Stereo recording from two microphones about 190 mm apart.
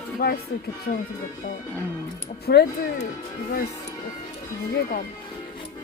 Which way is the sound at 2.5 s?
55° left (ahead or behind).